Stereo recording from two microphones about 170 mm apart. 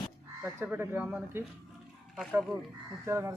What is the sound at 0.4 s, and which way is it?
Speech, 10° right (ahead or behind).